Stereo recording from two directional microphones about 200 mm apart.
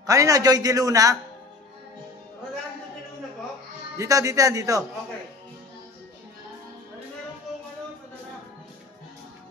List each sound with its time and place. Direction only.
0.0 s a man's voice: 15° right (ahead or behind)
4.0 s a man's voice: 15° right (ahead or behind)